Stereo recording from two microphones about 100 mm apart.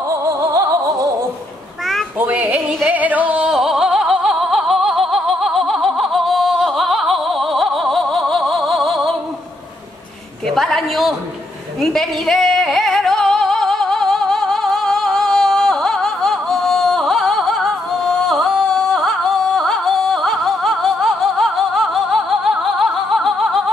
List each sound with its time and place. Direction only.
0.1 s music: 35° right (ahead or behind)
2.1 s music: 15° right (ahead or behind); by 9.1 s centre (ahead or behind)
10.5 s a sound: 5° left (ahead or behind)
11.8 s singing: 5° left (ahead or behind)